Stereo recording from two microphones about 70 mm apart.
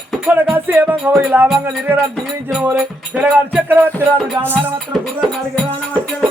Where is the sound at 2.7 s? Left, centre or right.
Centre.